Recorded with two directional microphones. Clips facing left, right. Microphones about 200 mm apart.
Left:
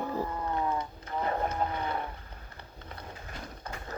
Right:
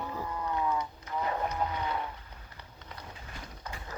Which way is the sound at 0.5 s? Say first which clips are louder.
Right 1 dB; 35° left (ahead or behind).